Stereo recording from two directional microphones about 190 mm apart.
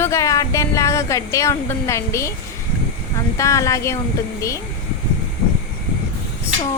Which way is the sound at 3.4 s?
15° left (ahead or behind).